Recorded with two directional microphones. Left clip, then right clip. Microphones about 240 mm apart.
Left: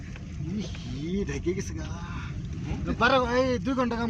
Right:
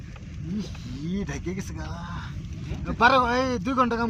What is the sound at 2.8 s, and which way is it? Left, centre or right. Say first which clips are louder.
Speech: right 4 dB; right.